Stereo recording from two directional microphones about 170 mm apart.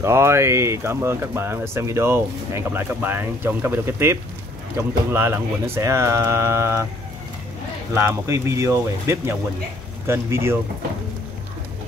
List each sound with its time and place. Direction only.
0.0 s speech: 15° right (ahead or behind)
7.9 s speech: 15° right (ahead or behind)